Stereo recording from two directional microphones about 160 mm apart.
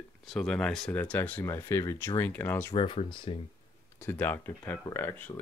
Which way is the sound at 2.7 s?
30° left (ahead or behind).